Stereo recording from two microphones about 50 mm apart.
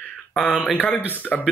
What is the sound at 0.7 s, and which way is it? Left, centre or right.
Speech, left.